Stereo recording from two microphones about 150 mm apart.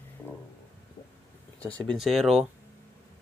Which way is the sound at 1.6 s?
10° left (ahead or behind).